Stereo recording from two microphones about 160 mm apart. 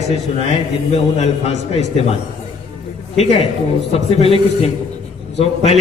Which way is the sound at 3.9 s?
40° left (ahead or behind).